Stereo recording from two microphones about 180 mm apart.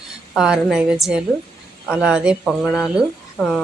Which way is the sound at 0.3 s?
5° right (ahead or behind).